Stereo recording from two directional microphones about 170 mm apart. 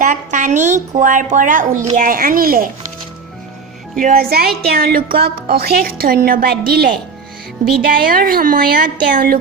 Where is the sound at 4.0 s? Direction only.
55° right (ahead or behind).